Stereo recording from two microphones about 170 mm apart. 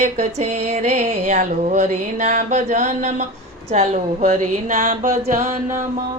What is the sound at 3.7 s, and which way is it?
A woman's voice, 40° right (ahead or behind).